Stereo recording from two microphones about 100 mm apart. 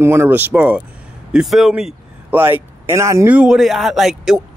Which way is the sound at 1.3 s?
5° right (ahead or behind).